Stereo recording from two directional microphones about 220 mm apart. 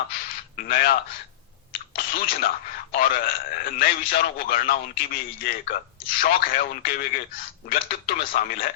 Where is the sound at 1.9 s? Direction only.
40° left (ahead or behind).